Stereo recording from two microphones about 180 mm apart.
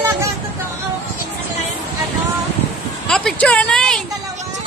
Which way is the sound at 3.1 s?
5° left (ahead or behind).